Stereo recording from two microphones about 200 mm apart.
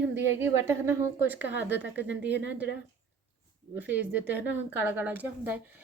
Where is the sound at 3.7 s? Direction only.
10° right (ahead or behind).